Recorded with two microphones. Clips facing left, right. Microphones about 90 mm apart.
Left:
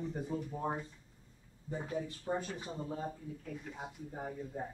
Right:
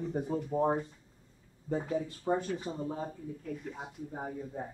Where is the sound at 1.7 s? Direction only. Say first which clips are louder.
Right 6 dB; 65° right (ahead or behind).